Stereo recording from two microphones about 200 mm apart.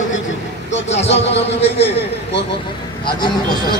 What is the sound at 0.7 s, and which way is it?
A man's voice, 30° left (ahead or behind).